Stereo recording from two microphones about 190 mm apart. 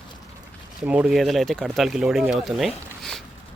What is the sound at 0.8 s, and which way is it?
Speech, 5° right (ahead or behind).